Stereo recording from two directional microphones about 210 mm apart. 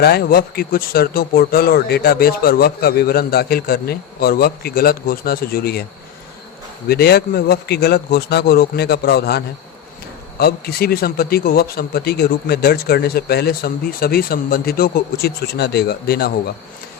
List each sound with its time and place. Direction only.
0.0 s a man's voice: 50° left (ahead or behind)
6.8 s a man's voice: 50° left (ahead or behind)